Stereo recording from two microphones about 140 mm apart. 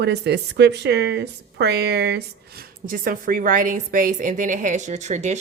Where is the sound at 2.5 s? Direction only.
85° right.